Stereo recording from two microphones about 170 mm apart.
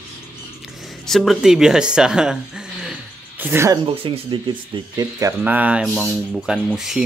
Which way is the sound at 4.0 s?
30° right (ahead or behind).